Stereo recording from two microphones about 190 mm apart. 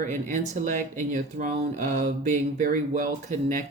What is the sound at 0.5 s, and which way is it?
Speech, 40° right (ahead or behind).